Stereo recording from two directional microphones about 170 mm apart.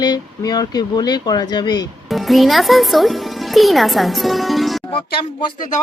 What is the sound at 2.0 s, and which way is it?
Speech, centre (ahead or behind).